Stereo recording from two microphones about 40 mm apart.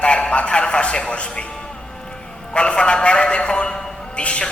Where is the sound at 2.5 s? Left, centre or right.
Left.